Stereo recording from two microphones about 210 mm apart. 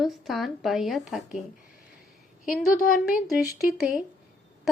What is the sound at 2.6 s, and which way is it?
Speech, 40° left (ahead or behind).